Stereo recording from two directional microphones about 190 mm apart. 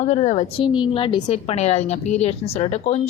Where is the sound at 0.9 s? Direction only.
25° left (ahead or behind).